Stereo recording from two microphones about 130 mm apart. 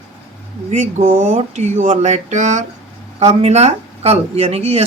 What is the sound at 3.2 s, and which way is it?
Speech, 55° right (ahead or behind).